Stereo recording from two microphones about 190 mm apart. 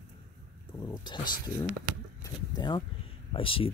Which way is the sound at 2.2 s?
20° left (ahead or behind).